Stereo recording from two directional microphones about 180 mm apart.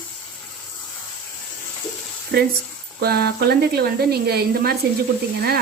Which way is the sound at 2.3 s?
65° right (ahead or behind).